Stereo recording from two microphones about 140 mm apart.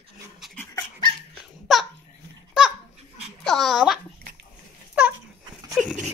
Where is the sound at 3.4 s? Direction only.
Centre (ahead or behind).